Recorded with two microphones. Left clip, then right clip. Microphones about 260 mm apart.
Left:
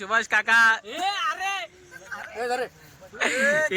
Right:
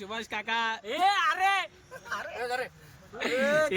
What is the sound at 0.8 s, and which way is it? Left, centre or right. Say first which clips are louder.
Speech: right 1 dB; centre.